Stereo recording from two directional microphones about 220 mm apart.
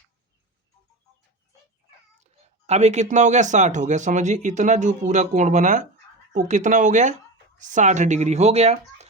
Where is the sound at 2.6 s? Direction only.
30° right (ahead or behind).